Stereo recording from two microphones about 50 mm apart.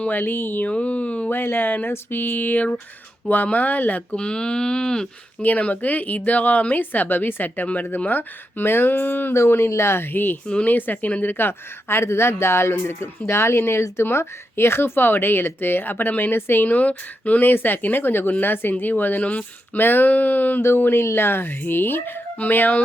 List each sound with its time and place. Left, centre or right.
0.0 s speech: left
0.7 s speech: left
1.3 s speech: left
4.1 s speech: centre
5.4 s speech: left
9.5 s speech: left
10.4 s speech: left
10.7 s a woman's voice: left
19.8 s speech: left
20.6 s speech: left